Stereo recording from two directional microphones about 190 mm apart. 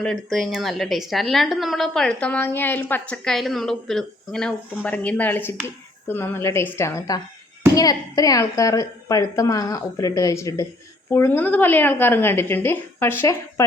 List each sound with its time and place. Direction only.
0.0 s a woman's voice: centre (ahead or behind)